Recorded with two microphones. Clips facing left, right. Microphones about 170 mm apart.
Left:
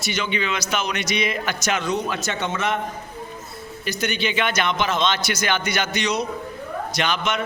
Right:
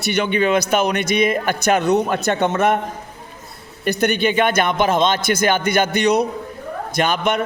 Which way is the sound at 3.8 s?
60° right (ahead or behind).